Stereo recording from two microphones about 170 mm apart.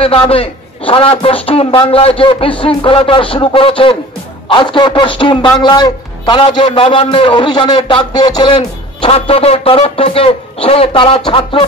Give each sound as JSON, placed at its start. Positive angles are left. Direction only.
{"t": 0.0, "sound": "a man's voice", "side_deg": 35}
{"t": 9.0, "sound": "a man's voice", "side_deg": 35}